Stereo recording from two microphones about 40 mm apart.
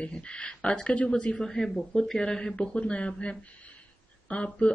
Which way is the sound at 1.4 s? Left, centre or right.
Centre.